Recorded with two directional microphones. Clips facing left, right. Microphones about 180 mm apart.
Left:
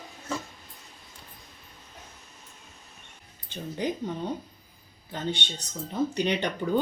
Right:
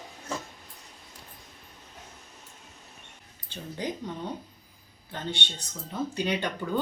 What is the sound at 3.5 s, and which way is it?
Speech, 15° left (ahead or behind).